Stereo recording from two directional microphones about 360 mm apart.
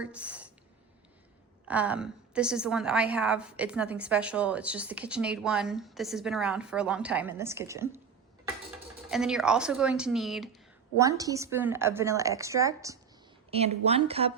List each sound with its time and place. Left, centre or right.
0.0 s speech: centre
1.6 s a woman's voice: centre
9.0 s a woman's voice: centre